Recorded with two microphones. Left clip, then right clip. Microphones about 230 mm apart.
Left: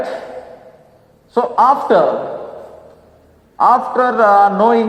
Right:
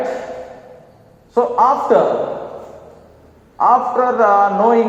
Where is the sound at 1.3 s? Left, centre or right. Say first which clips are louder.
Left 1 dB; left.